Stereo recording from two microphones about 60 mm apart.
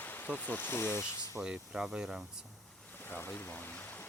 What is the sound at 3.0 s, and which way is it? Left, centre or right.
Speech, left.